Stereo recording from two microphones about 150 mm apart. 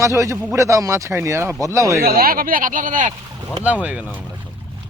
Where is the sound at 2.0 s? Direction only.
80° right; by 3.1 s 60° right (ahead or behind).